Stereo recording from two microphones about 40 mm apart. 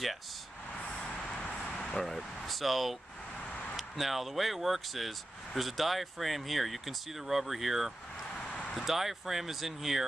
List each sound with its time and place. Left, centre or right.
0.9 s vehicle: centre
2.0 s speech: centre
8.4 s a sound: left
8.7 s speech: centre